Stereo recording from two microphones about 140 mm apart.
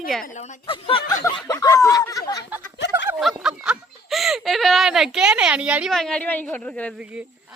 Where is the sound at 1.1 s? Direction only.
25° left (ahead or behind).